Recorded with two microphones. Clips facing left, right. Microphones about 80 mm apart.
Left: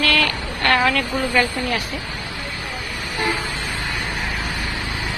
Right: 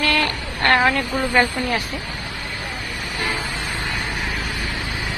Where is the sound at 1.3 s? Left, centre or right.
Right.